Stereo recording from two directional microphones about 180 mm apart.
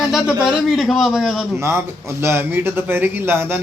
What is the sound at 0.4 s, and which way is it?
Speech, centre (ahead or behind).